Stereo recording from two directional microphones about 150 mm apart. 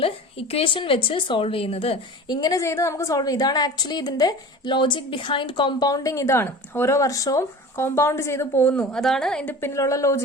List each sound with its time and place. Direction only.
0.0 s a woman's voice: 40° left (ahead or behind)
2.2 s a woman's voice: 30° left (ahead or behind)